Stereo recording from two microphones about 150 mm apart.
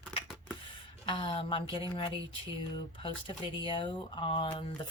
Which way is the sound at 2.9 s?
35° left (ahead or behind).